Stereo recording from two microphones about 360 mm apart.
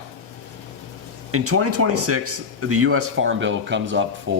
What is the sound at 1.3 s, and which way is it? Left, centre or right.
Speech, right.